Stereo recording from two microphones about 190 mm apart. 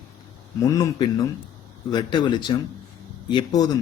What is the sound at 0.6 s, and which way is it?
Speech, 20° left (ahead or behind).